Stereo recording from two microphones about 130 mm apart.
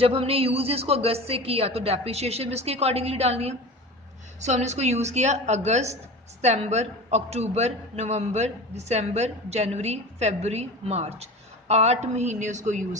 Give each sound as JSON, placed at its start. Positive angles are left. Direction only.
{"t": 0.0, "sound": "a woman's voice", "side_deg": -50}